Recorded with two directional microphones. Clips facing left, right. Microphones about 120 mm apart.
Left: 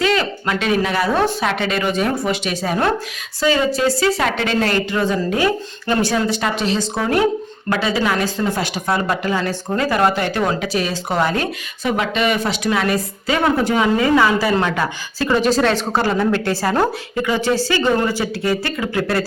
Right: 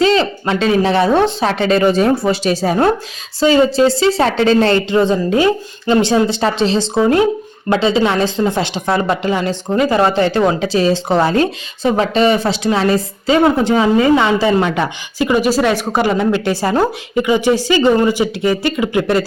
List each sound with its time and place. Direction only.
0.0 s speech: 30° right (ahead or behind)